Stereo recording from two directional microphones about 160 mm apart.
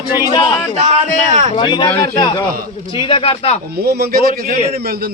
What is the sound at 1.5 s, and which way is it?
Speech, 30° left (ahead or behind).